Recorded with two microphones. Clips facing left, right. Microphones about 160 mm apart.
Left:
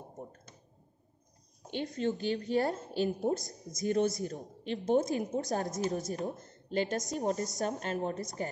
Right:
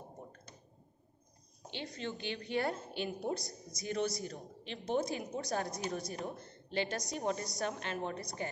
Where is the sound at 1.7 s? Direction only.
45° left (ahead or behind).